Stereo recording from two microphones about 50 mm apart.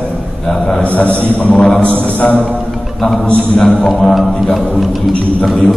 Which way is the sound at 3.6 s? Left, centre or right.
Centre.